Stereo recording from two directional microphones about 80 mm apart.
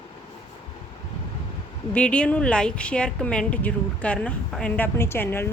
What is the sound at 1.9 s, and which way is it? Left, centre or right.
A woman's voice, centre.